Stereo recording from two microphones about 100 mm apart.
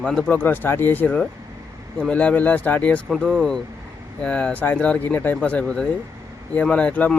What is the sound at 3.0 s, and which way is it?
Speech, centre (ahead or behind).